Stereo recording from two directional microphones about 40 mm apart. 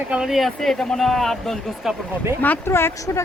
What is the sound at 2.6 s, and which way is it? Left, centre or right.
Speech, left.